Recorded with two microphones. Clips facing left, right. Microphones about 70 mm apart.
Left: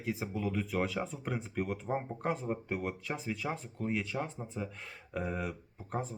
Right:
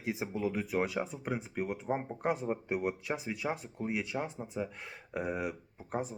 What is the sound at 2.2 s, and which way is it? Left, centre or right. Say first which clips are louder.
Speech: right 2 dB; centre.